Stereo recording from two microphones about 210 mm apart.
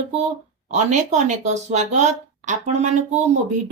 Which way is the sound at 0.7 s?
35° right (ahead or behind).